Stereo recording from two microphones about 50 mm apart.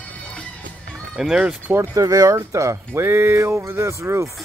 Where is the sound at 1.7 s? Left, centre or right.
Right.